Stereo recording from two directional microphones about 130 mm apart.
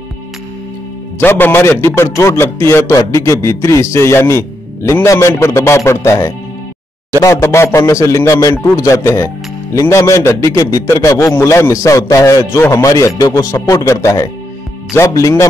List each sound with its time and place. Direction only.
1.2 s a man's voice: 15° left (ahead or behind)